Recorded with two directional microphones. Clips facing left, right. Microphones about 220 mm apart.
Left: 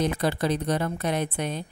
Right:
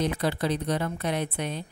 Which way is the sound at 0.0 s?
45° left (ahead or behind).